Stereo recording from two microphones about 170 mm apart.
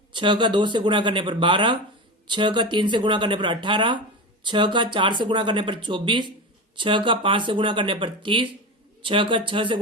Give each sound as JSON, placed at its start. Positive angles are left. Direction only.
{"t": 0.1, "sound": "speech", "side_deg": -30}